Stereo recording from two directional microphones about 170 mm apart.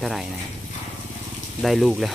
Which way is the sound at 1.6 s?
Centre (ahead or behind).